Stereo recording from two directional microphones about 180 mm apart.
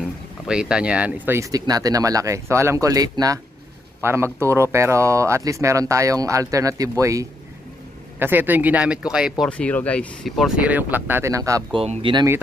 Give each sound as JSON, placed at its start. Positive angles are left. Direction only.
{"t": 0.5, "sound": "speech", "side_deg": -5}
{"t": 9.5, "sound": "speech", "side_deg": 5}
{"t": 11.7, "sound": "speech", "side_deg": -30}